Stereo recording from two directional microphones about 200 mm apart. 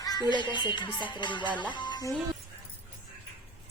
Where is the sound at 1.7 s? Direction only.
20° left (ahead or behind).